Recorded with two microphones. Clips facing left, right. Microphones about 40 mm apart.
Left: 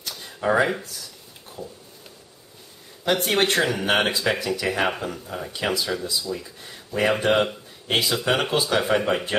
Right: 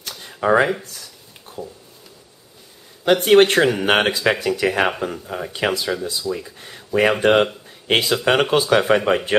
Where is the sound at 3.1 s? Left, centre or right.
Centre.